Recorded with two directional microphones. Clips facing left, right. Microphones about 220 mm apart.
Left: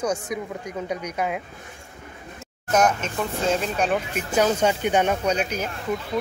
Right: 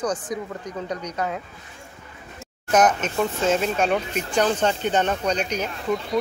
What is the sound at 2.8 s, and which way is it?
Speech, 25° left (ahead or behind).